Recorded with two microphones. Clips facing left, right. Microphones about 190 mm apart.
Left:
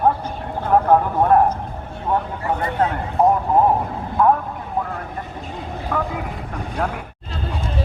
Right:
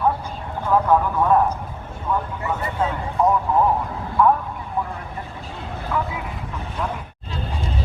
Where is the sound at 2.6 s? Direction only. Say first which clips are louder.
Left 4 dB; 45° left (ahead or behind).